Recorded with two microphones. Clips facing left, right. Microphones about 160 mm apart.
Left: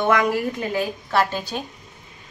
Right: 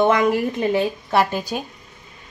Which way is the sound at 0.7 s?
15° right (ahead or behind).